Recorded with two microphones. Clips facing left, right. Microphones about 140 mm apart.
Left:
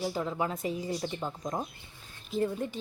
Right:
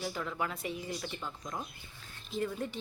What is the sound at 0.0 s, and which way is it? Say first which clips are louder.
A woman's voice: left 5 dB; 30° left (ahead or behind).